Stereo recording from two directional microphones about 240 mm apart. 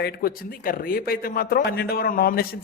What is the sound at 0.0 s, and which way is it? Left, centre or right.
A man's voice, left.